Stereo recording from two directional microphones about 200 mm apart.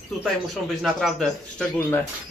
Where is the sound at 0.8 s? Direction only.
Centre (ahead or behind).